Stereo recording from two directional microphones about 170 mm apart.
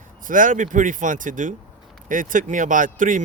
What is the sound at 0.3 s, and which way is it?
Speech, 50° right (ahead or behind).